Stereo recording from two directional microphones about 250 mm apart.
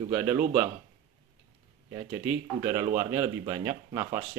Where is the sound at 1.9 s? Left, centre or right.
Centre.